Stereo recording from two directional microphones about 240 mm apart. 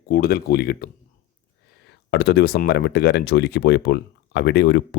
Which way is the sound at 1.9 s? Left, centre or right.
Left.